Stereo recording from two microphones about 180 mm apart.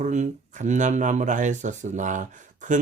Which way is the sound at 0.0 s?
40° right (ahead or behind).